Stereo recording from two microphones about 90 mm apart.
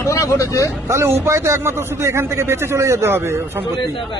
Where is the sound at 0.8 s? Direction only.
30° right (ahead or behind).